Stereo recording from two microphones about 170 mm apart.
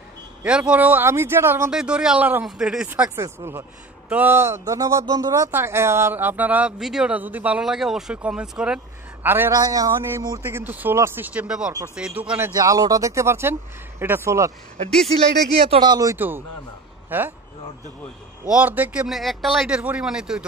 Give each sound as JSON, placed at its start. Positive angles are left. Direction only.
{"t": 0.4, "sound": "speech", "side_deg": -5}
{"t": 15.7, "sound": "speech", "side_deg": -25}
{"t": 18.5, "sound": "speech", "side_deg": -10}